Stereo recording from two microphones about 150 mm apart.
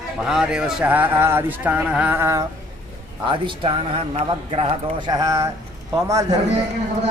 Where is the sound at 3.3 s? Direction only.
35° right (ahead or behind).